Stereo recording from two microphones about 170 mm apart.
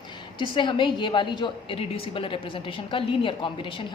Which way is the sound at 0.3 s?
30° left (ahead or behind).